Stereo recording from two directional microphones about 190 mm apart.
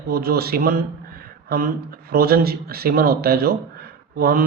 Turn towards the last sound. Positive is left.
turn(degrees=-50)  # may be behind; listen again after turning